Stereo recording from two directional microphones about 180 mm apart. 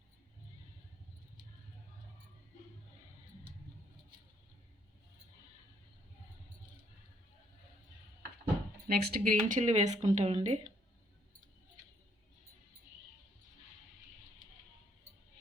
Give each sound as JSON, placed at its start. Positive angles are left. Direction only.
{"t": 8.9, "sound": "speech", "side_deg": -60}